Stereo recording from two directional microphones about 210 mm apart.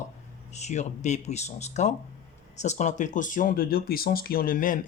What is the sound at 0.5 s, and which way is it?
Speech, 35° left (ahead or behind).